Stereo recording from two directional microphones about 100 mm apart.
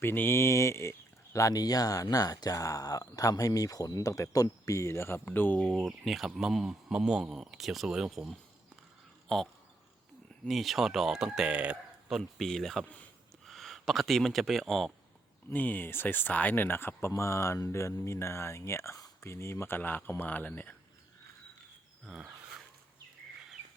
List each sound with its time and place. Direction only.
0.0 s speech: 20° left (ahead or behind)
5.5 s speech: 5° left (ahead or behind)
10.5 s speech: centre (ahead or behind)
15.4 s speech: 15° left (ahead or behind)